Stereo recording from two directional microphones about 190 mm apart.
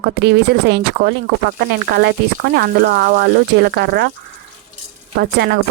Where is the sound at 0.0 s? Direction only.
60° right (ahead or behind).